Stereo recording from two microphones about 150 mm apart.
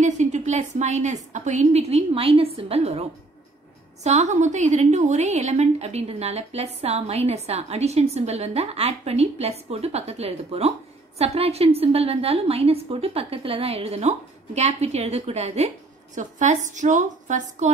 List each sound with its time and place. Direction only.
0.0 s a woman's voice: 50° right (ahead or behind)